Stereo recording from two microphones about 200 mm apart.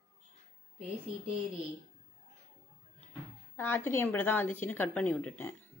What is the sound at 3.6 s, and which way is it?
Speech, 10° left (ahead or behind).